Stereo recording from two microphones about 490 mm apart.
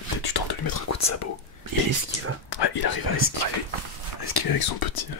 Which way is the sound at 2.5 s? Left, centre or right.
Left.